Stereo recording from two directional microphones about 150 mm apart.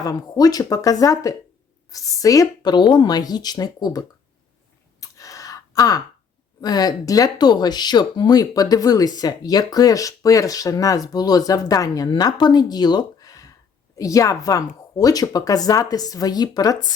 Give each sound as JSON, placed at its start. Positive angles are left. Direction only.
{"t": 0.0, "sound": "speech", "side_deg": 25}
{"t": 4.9, "sound": "a sound", "side_deg": 20}
{"t": 6.6, "sound": "speech", "side_deg": 25}